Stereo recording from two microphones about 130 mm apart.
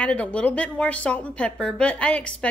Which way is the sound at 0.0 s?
10° left (ahead or behind).